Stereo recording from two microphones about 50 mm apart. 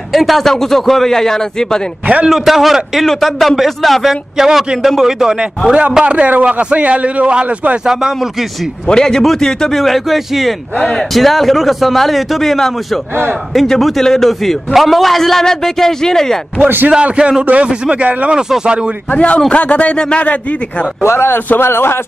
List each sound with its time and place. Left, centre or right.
0.1 s a man's voice: centre
2.2 s a man's voice: centre
5.7 s a man's voice: right
7.8 s speech: centre
8.8 s a man's voice: centre
16.5 s a man's voice: right
16.9 s a man's voice: right
18.3 s speech: centre
19.1 s a man's voice: left
21.0 s speech: left
21.3 s a man's voice: left